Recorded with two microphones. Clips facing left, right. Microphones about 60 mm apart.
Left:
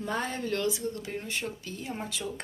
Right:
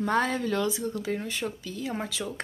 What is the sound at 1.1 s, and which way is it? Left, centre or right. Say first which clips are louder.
Speech: right 6 dB; right.